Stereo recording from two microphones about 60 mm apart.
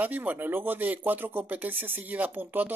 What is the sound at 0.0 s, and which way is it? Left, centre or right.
A man's voice, right.